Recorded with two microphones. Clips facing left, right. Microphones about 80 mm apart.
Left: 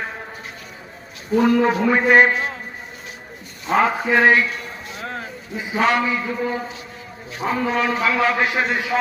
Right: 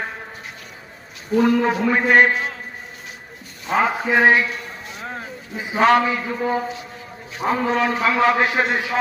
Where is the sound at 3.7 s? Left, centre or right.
Centre.